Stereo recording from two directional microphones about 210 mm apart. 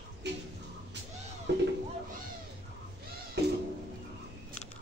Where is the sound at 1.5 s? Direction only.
55° right (ahead or behind).